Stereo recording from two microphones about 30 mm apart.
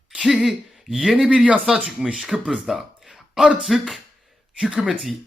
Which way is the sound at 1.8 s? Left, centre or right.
Right.